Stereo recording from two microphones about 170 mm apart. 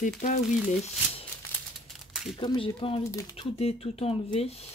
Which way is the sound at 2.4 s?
30° left (ahead or behind).